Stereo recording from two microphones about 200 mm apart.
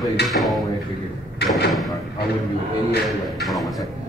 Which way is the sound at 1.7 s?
Centre (ahead or behind).